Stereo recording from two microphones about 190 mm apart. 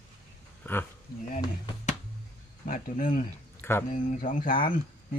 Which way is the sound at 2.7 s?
45° left (ahead or behind).